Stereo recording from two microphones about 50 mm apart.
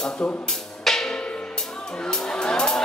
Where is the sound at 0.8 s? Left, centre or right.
Centre.